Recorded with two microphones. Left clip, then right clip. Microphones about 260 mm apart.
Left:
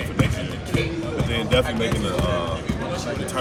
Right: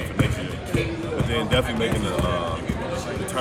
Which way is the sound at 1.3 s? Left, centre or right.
Centre.